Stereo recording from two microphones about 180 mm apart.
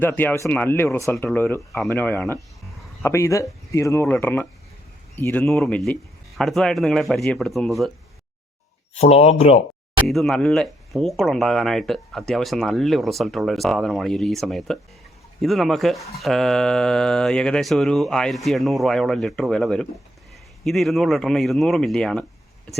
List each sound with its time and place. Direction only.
0.0 s speech: 10° left (ahead or behind)
9.0 s speech: 35° left (ahead or behind)
10.1 s speech: centre (ahead or behind)